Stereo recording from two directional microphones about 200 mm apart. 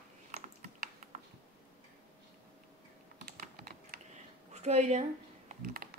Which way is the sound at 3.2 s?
50° right (ahead or behind).